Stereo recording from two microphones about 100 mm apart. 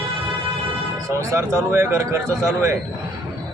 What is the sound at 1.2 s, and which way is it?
Speech, 30° right (ahead or behind).